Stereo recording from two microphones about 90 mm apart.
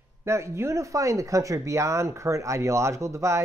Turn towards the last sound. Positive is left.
turn(degrees=-35)  # may be behind; listen again after turning